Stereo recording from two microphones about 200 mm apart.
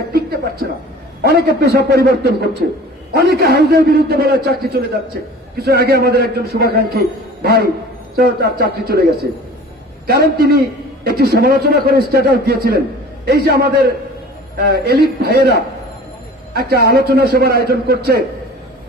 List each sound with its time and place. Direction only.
1.2 s a man's voice: 50° right (ahead or behind)